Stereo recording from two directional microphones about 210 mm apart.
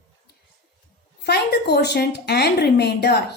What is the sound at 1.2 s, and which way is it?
A woman's voice, 50° left (ahead or behind).